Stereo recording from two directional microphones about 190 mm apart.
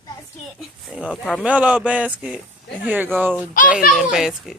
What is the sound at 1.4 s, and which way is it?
A child's voice, 5° right (ahead or behind).